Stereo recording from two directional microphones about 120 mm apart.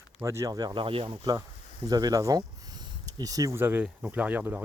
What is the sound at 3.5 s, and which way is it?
Speech, 15° right (ahead or behind).